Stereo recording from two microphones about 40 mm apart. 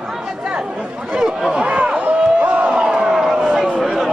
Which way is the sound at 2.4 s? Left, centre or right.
Right.